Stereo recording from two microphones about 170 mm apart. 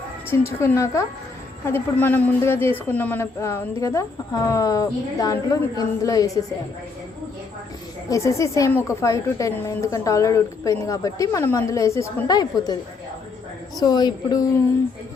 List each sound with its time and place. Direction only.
0.3 s speech: 15° left (ahead or behind)
8.1 s a woman's voice: 20° left (ahead or behind)
13.7 s a woman's voice: 25° left (ahead or behind)